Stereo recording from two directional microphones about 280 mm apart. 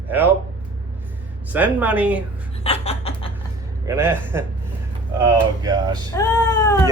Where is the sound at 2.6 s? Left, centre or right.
Left.